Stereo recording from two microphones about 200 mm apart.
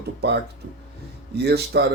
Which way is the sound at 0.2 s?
55° right (ahead or behind).